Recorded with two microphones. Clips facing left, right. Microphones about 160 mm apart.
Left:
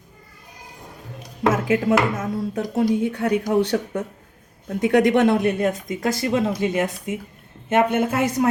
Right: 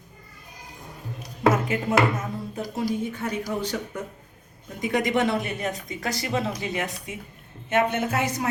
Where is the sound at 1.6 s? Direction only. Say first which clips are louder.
Left 7 dB; 90° left.